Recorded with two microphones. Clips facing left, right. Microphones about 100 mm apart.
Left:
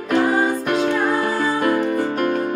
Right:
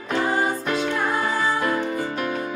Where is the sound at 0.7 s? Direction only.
50° left (ahead or behind).